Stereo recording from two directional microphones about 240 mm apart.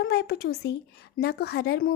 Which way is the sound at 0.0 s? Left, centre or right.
Left.